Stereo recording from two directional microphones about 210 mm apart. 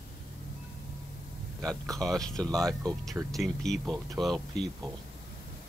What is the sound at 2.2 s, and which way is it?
Speech, 5° left (ahead or behind).